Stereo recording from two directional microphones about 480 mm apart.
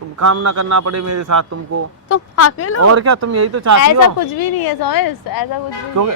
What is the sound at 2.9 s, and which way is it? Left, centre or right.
Speech, right.